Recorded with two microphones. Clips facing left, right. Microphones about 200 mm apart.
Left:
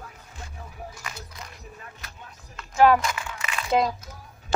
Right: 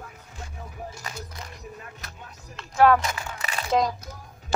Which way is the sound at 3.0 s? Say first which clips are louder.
Left 1 dB; 35° right (ahead or behind).